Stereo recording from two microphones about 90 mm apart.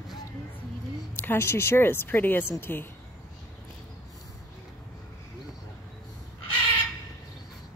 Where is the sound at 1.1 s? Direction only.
25° left (ahead or behind).